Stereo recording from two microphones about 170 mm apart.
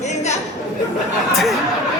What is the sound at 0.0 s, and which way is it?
Chatter, 40° left (ahead or behind).